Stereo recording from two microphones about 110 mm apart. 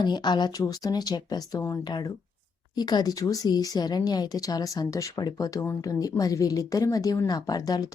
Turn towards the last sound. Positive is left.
turn(degrees=35)  # may be behind; listen again after turning